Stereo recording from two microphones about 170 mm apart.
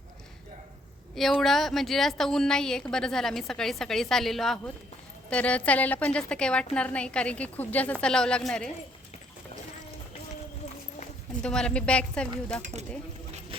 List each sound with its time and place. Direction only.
1.1 s a woman's voice: centre (ahead or behind)
11.4 s a woman's voice: 5° left (ahead or behind)
13.5 s engine: 30° right (ahead or behind)